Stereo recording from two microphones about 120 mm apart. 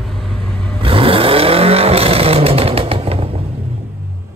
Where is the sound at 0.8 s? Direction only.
50° right (ahead or behind).